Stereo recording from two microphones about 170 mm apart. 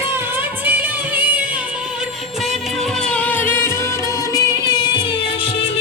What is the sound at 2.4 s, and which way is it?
Music, centre (ahead or behind).